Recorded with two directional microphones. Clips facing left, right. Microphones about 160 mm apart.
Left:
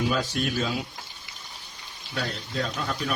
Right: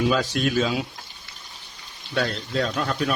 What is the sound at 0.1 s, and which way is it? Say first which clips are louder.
Speech: right 4 dB; 90° right.